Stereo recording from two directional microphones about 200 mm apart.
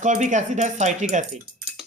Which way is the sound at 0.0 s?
35° right (ahead or behind).